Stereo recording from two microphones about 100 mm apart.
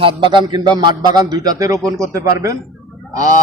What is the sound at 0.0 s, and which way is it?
A man's voice, 55° right (ahead or behind).